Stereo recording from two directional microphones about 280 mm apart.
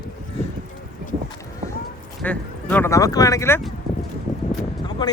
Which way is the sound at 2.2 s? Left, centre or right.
Centre.